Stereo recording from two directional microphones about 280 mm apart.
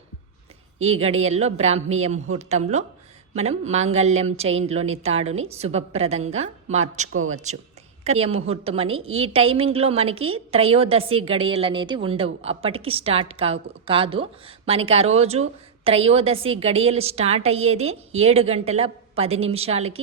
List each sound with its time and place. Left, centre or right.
0.9 s a woman's voice: right